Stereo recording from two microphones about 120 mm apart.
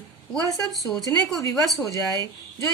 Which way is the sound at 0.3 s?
30° left (ahead or behind).